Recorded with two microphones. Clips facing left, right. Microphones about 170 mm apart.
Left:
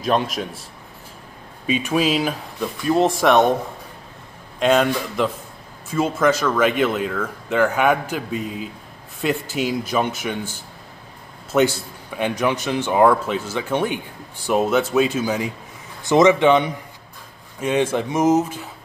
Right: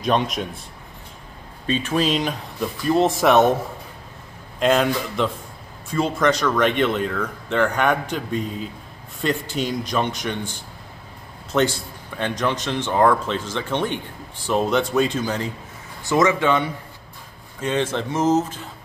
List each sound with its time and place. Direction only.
0.0 s speech: centre (ahead or behind)
1.7 s speech: 10° left (ahead or behind)
4.6 s speech: centre (ahead or behind)